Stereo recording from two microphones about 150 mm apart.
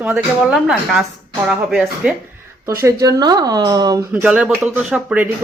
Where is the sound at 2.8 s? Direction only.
20° right (ahead or behind).